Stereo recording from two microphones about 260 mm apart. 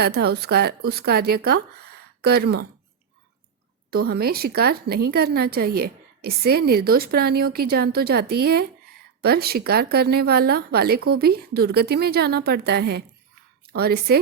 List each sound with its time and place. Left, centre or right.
0.0 s a woman's voice: right
3.9 s a woman's voice: right